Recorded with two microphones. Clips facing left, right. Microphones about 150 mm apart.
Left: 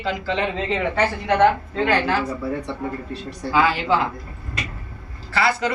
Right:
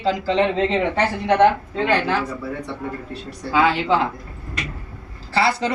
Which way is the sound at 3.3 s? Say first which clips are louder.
Right 1 dB; 25° right (ahead or behind).